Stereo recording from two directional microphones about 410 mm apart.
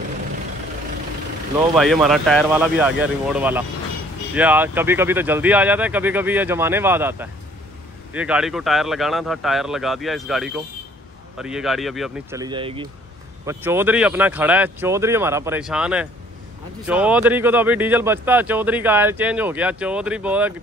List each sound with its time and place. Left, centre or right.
1.8 s speech: centre